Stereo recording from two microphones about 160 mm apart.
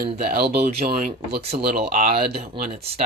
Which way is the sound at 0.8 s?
70° right (ahead or behind).